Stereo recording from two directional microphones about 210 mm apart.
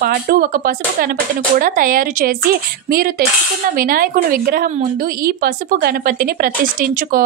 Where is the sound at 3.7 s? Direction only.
45° right (ahead or behind).